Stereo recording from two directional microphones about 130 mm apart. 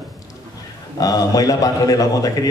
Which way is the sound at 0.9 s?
30° left (ahead or behind).